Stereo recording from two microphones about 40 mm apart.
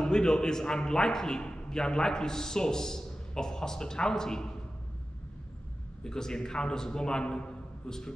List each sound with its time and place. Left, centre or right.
0.0 s a man's voice: centre
6.0 s a man's voice: centre